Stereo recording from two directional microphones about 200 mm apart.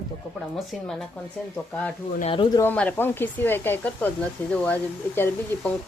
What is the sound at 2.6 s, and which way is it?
Speech, 10° left (ahead or behind).